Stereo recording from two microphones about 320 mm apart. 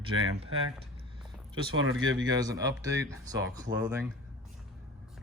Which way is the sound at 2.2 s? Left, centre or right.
Centre.